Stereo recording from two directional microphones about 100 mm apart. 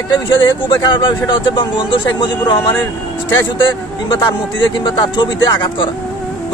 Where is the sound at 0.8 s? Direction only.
45° left (ahead or behind).